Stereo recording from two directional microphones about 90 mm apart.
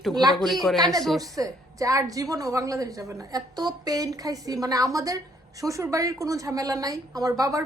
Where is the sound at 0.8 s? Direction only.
45° right (ahead or behind).